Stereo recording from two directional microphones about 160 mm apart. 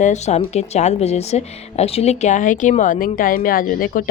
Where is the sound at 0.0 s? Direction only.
45° left (ahead or behind).